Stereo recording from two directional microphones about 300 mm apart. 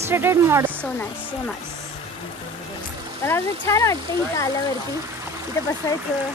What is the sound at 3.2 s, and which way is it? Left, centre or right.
Speech, centre.